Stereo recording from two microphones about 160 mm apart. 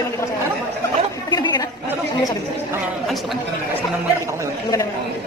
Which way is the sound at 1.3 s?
25° left (ahead or behind).